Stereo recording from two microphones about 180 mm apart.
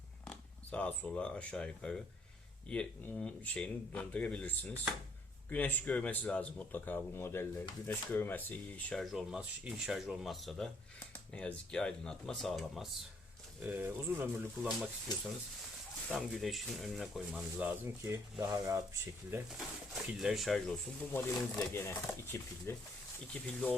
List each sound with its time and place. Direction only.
0.3 s speech: 5° left (ahead or behind)
17.8 s speech: 20° right (ahead or behind)
19.3 s speech: 5° right (ahead or behind)
21.1 s speech: 15° left (ahead or behind)